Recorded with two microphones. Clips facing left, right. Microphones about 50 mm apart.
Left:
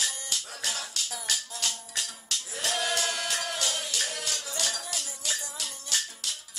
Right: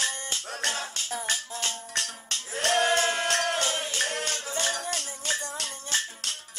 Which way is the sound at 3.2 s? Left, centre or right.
Right.